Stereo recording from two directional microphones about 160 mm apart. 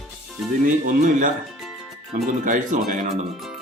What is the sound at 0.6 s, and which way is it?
Speech, 55° right (ahead or behind).